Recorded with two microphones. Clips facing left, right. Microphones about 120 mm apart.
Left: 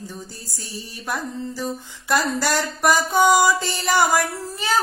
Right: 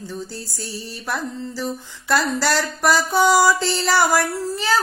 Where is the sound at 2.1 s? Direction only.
15° left (ahead or behind).